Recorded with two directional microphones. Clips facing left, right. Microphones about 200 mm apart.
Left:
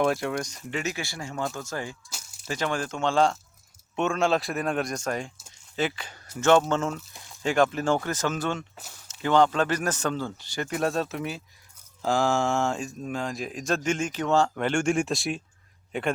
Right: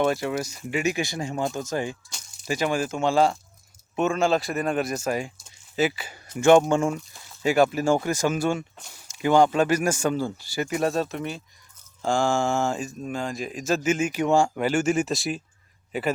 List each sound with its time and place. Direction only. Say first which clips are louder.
0.0 s speech: right 1 dB; centre (ahead or behind)
5.5 s a sound: right 4 dB; 5° right (ahead or behind)
6.3 s a man's voice: right 4 dB; 10° right (ahead or behind)